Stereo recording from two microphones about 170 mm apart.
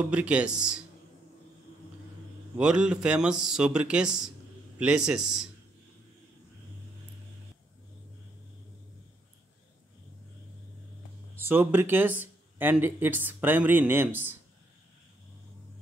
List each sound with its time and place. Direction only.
0.0 s speech: 10° right (ahead or behind)
2.5 s speech: 5° right (ahead or behind)
11.3 s speech: 10° right (ahead or behind)